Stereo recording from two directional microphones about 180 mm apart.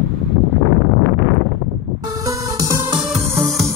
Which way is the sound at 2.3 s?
15° right (ahead or behind).